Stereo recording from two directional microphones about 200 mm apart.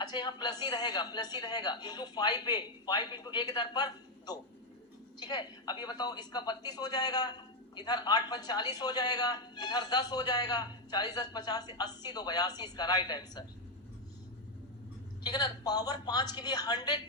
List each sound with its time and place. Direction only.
0.0 s speech: 20° left (ahead or behind)
15.2 s speech: 20° left (ahead or behind)